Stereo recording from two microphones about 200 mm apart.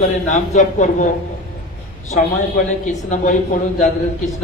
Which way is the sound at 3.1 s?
40° left (ahead or behind).